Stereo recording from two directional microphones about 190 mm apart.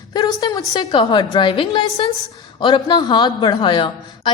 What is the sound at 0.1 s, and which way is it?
A woman's voice, 20° left (ahead or behind).